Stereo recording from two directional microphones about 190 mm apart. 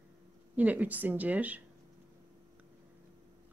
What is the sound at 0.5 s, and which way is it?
Speech, 10° right (ahead or behind).